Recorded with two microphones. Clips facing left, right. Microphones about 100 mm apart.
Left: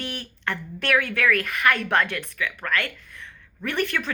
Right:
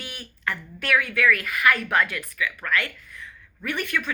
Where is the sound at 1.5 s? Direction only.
30° left (ahead or behind).